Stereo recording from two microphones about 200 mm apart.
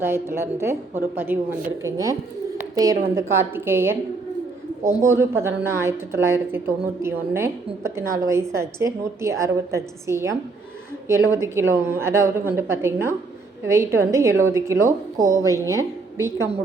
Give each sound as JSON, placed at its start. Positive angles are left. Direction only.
{"t": 0.0, "sound": "a woman's voice", "side_deg": -10}